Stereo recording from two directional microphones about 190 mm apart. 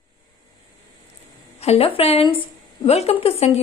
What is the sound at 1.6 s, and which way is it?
Speech, 30° left (ahead or behind).